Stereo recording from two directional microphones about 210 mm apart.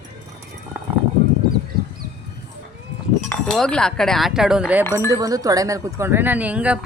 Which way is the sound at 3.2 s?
Centre (ahead or behind).